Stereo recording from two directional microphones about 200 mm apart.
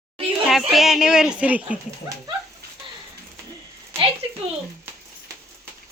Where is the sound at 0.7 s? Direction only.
Centre (ahead or behind).